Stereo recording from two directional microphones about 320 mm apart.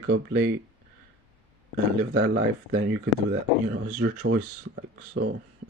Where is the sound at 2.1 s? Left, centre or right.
Right.